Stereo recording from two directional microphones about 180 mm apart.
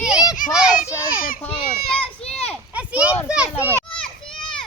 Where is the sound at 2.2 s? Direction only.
5° left (ahead or behind).